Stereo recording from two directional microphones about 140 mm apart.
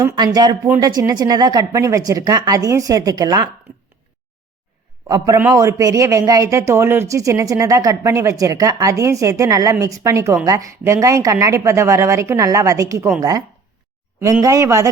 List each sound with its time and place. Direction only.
0.0 s speech: 30° right (ahead or behind)
5.0 s speech: 25° right (ahead or behind)
14.4 s speech: 20° right (ahead or behind)